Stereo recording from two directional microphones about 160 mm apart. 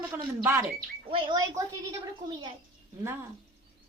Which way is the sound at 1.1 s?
35° right (ahead or behind).